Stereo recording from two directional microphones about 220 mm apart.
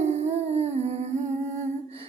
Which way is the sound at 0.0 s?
30° right (ahead or behind).